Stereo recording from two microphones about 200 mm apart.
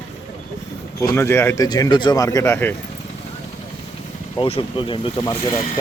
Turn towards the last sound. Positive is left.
turn(degrees=20)  # may be behind; listen again after turning